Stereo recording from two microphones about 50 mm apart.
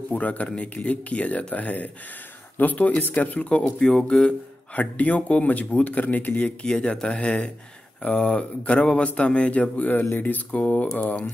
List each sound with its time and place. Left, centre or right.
0.1 s speech: left
3.6 s speech: centre
4.1 s speech: centre
4.7 s speech: left
6.6 s speech: centre; by 10.6 s left
10.6 s speech: left